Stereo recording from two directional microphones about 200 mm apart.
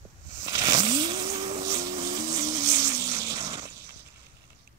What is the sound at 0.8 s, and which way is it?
Vehicle, 25° right (ahead or behind).